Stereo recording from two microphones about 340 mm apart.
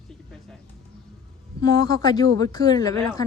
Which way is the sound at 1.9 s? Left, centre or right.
Centre.